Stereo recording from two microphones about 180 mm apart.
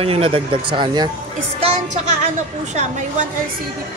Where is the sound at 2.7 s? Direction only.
40° right (ahead or behind).